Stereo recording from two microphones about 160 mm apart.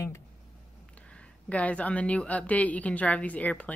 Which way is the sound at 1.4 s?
10° left (ahead or behind).